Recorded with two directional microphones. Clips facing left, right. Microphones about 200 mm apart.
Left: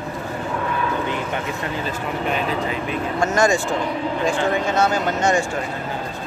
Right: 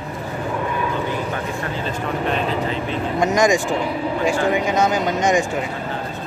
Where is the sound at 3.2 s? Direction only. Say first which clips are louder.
Right 2 dB; 15° right (ahead or behind).